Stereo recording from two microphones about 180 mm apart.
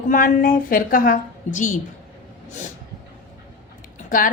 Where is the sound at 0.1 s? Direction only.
50° left (ahead or behind).